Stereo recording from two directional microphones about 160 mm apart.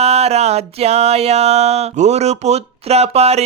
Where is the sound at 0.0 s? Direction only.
40° right (ahead or behind).